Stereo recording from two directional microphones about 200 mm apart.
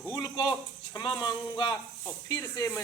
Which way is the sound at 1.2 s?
20° left (ahead or behind).